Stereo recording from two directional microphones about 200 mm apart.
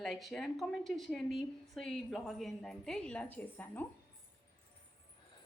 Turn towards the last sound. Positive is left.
turn(degrees=10)  # may be behind; listen again after turning